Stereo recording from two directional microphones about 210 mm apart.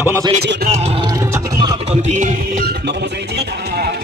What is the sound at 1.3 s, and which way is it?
Music, 20° right (ahead or behind).